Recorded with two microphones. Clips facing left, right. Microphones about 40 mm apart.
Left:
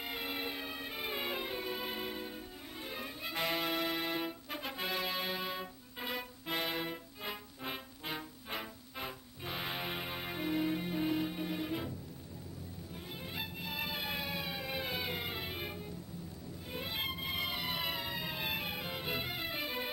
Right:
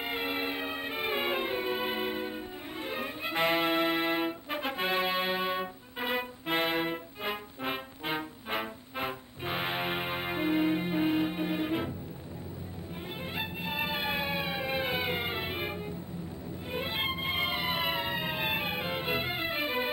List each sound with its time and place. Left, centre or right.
0.0 s music: right
13.2 s music: right